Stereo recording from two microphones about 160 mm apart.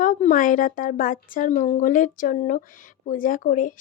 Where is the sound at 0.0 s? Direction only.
55° left (ahead or behind).